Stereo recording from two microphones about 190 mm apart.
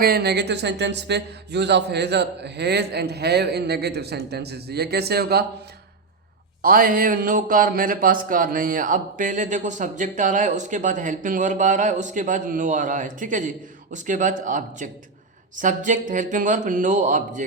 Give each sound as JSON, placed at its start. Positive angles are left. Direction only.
{"t": 0.0, "sound": "speech", "side_deg": -55}
{"t": 6.6, "sound": "a man's voice", "side_deg": -50}